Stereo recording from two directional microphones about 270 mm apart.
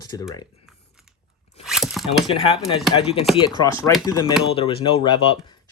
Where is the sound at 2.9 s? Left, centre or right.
Left.